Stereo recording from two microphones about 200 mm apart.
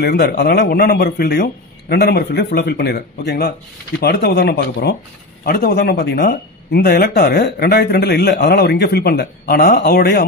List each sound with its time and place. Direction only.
0.0 s speech: 55° left (ahead or behind)